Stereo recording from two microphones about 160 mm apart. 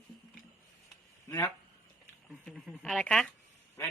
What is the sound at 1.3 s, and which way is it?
Speech, 20° left (ahead or behind).